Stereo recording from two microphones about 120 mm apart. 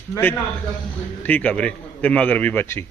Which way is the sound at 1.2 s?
15° left (ahead or behind).